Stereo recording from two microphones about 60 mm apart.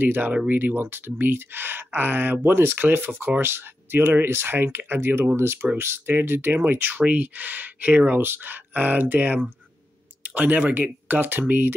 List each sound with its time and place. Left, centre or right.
0.0 s speech: right
8.2 s speech: right